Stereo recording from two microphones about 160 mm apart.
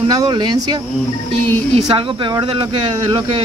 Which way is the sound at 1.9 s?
30° right (ahead or behind).